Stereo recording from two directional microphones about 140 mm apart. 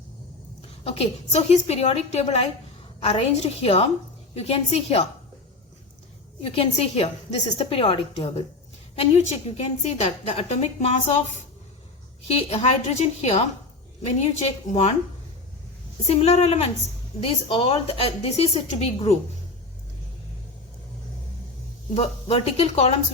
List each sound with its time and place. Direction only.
0.9 s a woman's voice: 50° left (ahead or behind)
6.4 s a woman's voice: 45° left (ahead or behind)
12.3 s a woman's voice: 45° left (ahead or behind)
16.0 s a woman's voice: 45° left (ahead or behind)
21.9 s a woman's voice: 45° left (ahead or behind)